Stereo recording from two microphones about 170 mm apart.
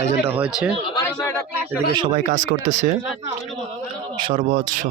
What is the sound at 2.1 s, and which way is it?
Speech, 45° right (ahead or behind).